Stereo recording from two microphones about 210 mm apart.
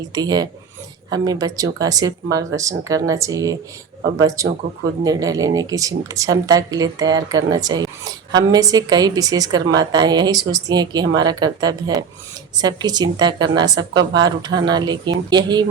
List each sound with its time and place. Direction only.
0.1 s a woman's voice: 20° right (ahead or behind)